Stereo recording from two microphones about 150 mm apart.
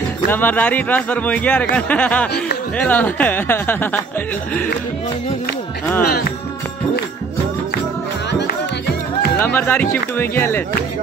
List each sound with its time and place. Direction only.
0.3 s speech: 10° left (ahead or behind)
6.0 s speech: 90° left
9.4 s speech: 10° left (ahead or behind)